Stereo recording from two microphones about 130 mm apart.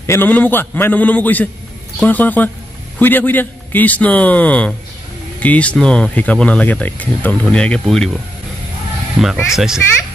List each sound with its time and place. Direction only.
0.0 s speech: 20° left (ahead or behind)
9.2 s speech: centre (ahead or behind)